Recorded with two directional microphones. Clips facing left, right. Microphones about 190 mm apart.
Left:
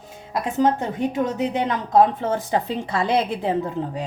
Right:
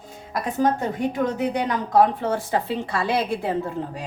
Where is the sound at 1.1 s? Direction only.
25° left (ahead or behind).